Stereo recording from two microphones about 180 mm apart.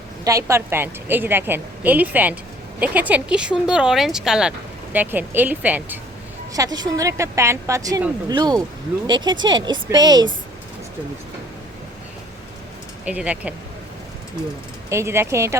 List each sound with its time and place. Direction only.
0.3 s speech: 15° right (ahead or behind)
6.5 s speech: 20° right (ahead or behind)
13.1 s speech: 5° right (ahead or behind)
14.8 s speech: 15° right (ahead or behind)